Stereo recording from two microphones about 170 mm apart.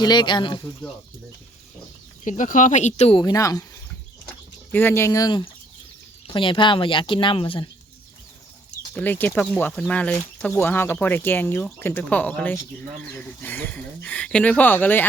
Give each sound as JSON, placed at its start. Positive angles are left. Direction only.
{"t": 0.0, "sound": "speech", "side_deg": 25}
{"t": 2.2, "sound": "speech", "side_deg": 50}
{"t": 3.2, "sound": "speech", "side_deg": 20}
{"t": 4.7, "sound": "speech", "side_deg": 10}
{"t": 9.0, "sound": "speech", "side_deg": 10}